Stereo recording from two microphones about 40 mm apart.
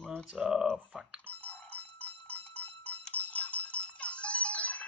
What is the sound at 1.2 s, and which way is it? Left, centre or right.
Goat, left.